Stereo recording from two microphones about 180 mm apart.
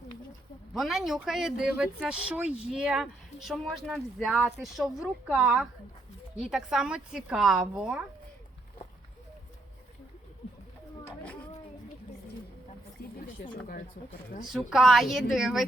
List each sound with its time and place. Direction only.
0.7 s speech: centre (ahead or behind)
13.0 s a sound: 60° left (ahead or behind)
13.4 s speech: 50° left (ahead or behind)
14.5 s speech: centre (ahead or behind)